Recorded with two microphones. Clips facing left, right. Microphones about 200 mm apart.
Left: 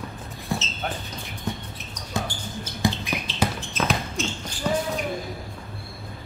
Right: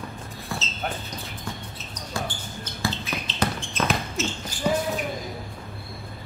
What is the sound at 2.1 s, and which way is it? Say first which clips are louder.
Basketball bounce: left 3 dB; 15° left (ahead or behind).